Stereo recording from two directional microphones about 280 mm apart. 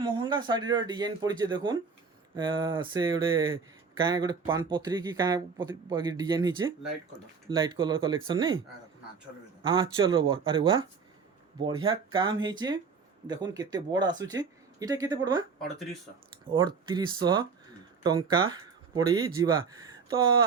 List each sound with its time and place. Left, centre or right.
0.0 s speech: centre
9.6 s speech: centre
16.5 s speech: centre